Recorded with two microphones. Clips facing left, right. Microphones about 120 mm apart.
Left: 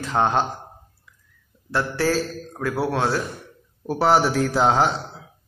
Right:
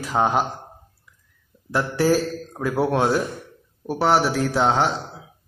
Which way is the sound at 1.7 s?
10° right (ahead or behind).